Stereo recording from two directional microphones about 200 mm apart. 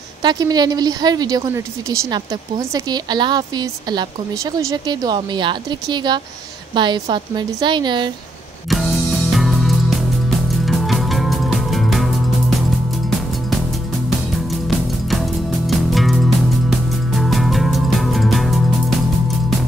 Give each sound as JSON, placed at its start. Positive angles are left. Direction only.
{"t": 0.2, "sound": "a woman's voice", "side_deg": -20}
{"t": 8.6, "sound": "music", "side_deg": 0}
{"t": 15.0, "sound": "music", "side_deg": 0}